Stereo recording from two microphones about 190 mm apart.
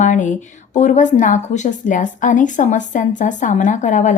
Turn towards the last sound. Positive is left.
turn(degrees=40)  # may be behind; listen again after turning